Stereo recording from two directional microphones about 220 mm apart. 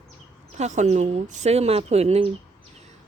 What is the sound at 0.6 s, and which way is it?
Speech, 30° right (ahead or behind).